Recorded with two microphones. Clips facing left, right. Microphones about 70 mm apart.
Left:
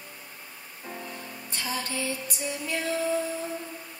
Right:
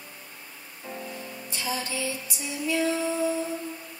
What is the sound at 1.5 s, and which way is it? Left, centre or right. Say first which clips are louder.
Music: right 1 dB; left.